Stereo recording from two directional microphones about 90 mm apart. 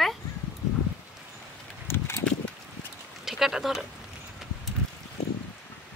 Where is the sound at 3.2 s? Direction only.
5° right (ahead or behind).